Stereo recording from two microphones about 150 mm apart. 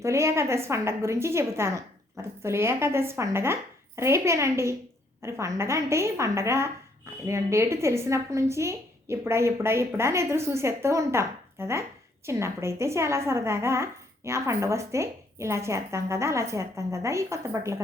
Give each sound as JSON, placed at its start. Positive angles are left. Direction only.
{"t": 0.0, "sound": "speech", "side_deg": -20}